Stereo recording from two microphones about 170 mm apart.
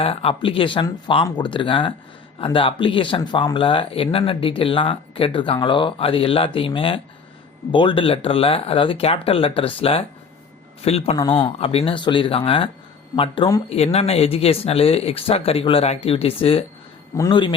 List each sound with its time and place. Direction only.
0.0 s speech: 35° left (ahead or behind)
11.2 s speech: 25° left (ahead or behind)